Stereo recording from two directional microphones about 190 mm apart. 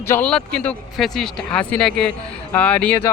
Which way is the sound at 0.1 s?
5° left (ahead or behind).